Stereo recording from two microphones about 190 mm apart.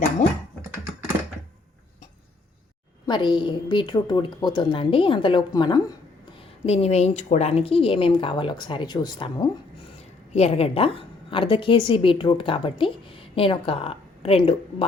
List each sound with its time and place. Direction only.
3.1 s a woman's voice: 25° left (ahead or behind)
6.7 s a woman's voice: 35° left (ahead or behind)